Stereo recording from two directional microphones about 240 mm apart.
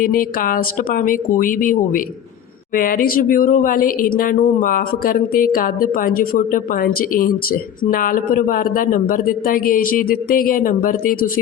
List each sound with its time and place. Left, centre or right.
0.0 s speech: left